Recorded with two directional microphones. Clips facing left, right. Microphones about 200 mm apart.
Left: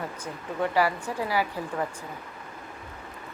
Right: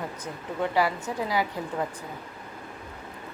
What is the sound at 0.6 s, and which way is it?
Speech, 15° right (ahead or behind).